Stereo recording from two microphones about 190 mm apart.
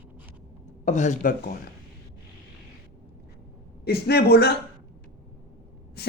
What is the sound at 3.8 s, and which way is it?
Speech, 55° left (ahead or behind).